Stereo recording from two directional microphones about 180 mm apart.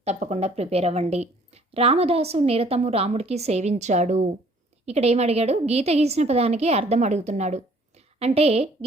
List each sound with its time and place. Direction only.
0.0 s a woman's voice: 40° right (ahead or behind)